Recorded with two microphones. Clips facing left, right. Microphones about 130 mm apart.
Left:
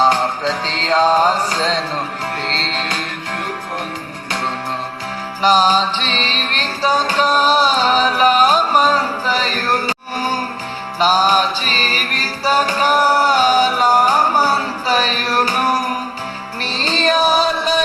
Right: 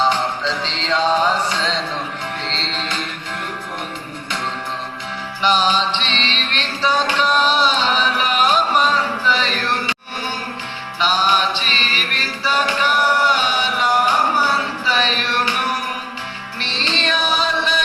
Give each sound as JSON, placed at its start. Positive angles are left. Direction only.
{"t": 0.0, "sound": "music", "side_deg": 45}
{"t": 5.4, "sound": "music", "side_deg": 40}